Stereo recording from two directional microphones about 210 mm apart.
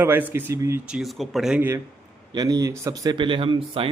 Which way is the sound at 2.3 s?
20° right (ahead or behind).